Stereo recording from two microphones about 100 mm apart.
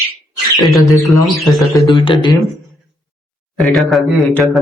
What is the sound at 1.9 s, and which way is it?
Speech, 50° left (ahead or behind).